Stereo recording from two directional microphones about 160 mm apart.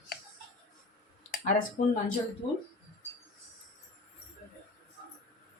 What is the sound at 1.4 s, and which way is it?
Speech, 55° left (ahead or behind).